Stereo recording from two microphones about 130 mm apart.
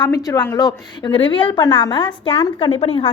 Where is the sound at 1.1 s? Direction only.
40° left (ahead or behind).